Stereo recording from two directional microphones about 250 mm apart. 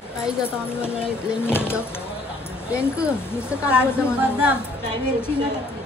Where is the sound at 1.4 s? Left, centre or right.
Centre.